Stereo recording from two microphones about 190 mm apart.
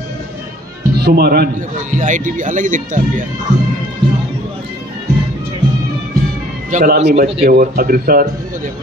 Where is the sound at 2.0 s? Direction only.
40° right (ahead or behind).